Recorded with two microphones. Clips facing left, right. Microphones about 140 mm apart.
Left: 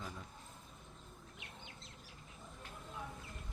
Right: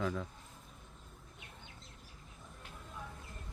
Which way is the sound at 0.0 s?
90° right.